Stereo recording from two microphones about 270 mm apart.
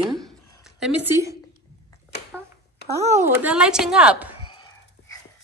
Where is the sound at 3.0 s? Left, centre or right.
Right.